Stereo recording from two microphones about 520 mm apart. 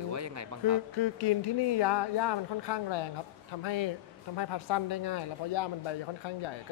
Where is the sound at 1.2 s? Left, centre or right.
Left.